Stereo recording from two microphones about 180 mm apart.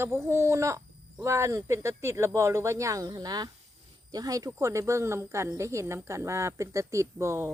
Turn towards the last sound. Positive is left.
turn(degrees=-15)  # may be behind; listen again after turning